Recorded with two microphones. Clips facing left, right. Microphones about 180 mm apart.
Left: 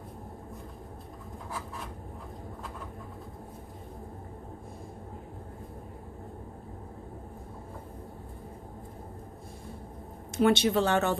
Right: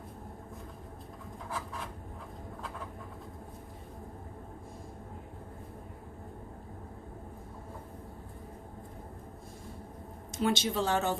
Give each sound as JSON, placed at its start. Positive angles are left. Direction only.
{"t": 1.5, "sound": "rub", "side_deg": 0}
{"t": 10.3, "sound": "speech", "side_deg": 65}